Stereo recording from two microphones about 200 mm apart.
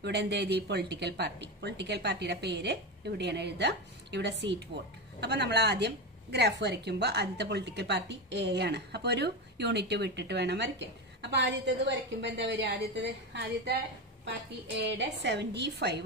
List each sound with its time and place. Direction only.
0.0 s a woman's voice: 60° right (ahead or behind)
15.2 s a woman's voice: 60° right (ahead or behind)